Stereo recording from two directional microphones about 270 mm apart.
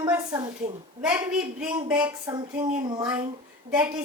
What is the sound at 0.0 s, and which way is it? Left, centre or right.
A woman's voice, centre.